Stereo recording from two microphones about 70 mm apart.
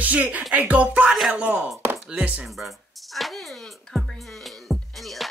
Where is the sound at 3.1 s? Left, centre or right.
Centre.